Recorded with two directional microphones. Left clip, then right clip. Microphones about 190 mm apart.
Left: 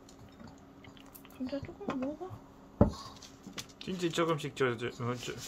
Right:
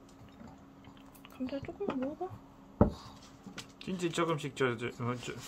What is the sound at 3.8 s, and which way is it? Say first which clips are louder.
Speech: left 1 dB; centre (ahead or behind).